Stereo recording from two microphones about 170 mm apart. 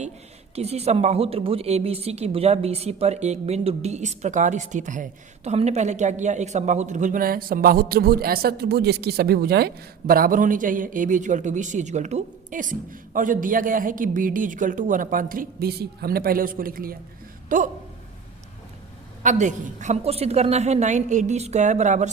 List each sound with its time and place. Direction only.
0.5 s a woman's voice: 40° right (ahead or behind)
19.2 s a woman's voice: 45° right (ahead or behind)